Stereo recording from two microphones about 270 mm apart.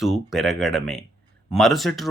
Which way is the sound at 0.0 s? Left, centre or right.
Centre.